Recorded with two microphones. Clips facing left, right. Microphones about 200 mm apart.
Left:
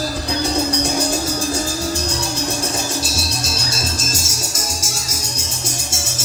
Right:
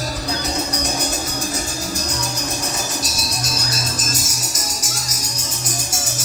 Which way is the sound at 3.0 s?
25° left (ahead or behind).